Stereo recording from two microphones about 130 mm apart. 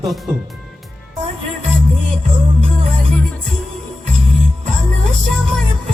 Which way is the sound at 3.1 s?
5° left (ahead or behind).